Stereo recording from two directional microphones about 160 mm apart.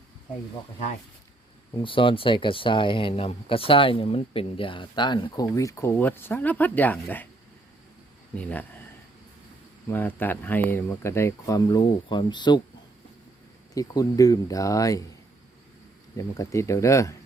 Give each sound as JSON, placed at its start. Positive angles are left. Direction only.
{"t": 1.7, "sound": "speech", "side_deg": 30}
{"t": 8.4, "sound": "speech", "side_deg": 10}
{"t": 9.9, "sound": "speech", "side_deg": 10}
{"t": 13.7, "sound": "speech", "side_deg": 20}
{"t": 16.1, "sound": "speech", "side_deg": 20}